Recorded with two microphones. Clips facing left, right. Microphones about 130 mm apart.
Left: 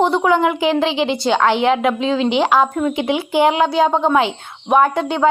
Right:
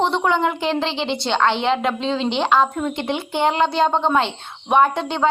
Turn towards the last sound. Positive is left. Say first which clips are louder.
# left 2 dB
turn(degrees=5)  # may be behind; listen again after turning